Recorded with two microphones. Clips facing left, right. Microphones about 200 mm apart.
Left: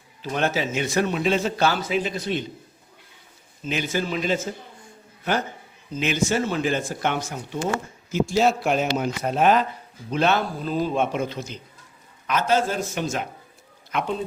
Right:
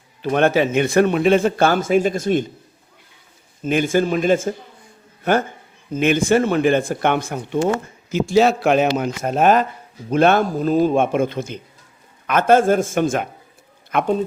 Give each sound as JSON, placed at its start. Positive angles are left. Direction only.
{"t": 0.2, "sound": "speech", "side_deg": -60}
{"t": 3.6, "sound": "a man's voice", "side_deg": -50}
{"t": 8.1, "sound": "a man's voice", "side_deg": -75}